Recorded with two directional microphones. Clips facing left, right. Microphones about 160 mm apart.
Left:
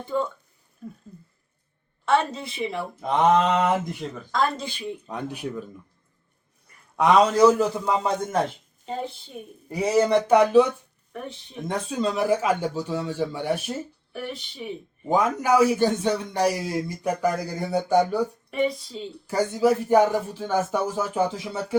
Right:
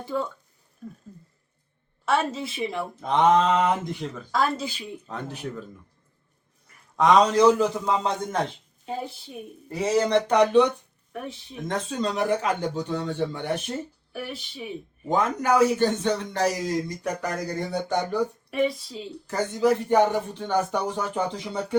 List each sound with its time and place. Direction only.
0.0 s speech: 5° right (ahead or behind)
2.0 s speech: 5° right (ahead or behind)
5.0 s speech: 15° left (ahead or behind)
6.9 s speech: 5° left (ahead or behind)
9.6 s speech: 10° left (ahead or behind)
14.1 s speech: 5° right (ahead or behind)
15.1 s speech: 10° left (ahead or behind)
19.3 s speech: 10° left (ahead or behind)